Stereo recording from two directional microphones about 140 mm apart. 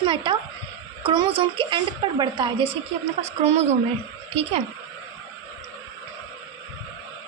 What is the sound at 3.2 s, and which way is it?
Speech, 50° right (ahead or behind).